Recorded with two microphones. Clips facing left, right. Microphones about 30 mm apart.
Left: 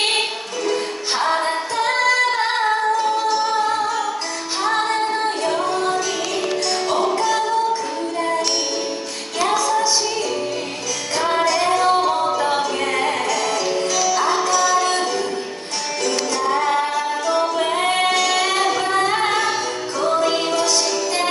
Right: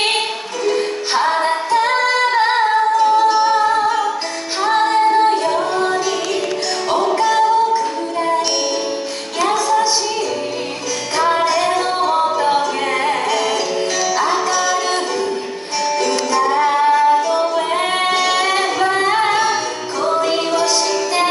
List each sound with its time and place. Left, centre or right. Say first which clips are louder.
0.7 s music: right 4 dB; centre
3.3 s music: right 5 dB; right
4.6 s female singing: right 6 dB; centre
5.8 s music: right 3 dB; centre
7.0 s female singing: right 7 dB; centre
9.4 s music: right 3 dB; centre
11.1 s music: right 3 dB; centre
12.0 s music: right 3 dB; centre
16.3 s music: right 5 dB; centre
17.3 s singing: right 2 dB; centre
20.0 s music: right 2 dB; centre